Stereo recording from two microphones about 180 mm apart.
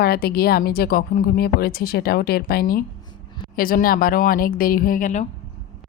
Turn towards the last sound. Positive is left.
turn(degrees=45)  # may be behind; listen again after turning